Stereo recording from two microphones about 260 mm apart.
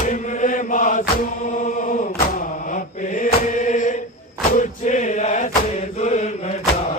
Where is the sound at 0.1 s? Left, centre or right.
Left.